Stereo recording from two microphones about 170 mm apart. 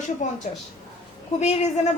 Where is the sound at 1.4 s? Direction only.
40° left (ahead or behind).